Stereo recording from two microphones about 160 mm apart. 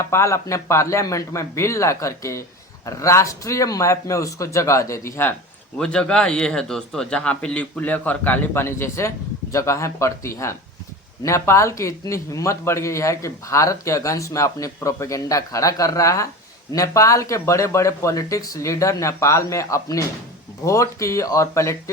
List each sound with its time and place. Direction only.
0.0 s a man's voice: 15° left (ahead or behind)
5.7 s a man's voice: 5° left (ahead or behind)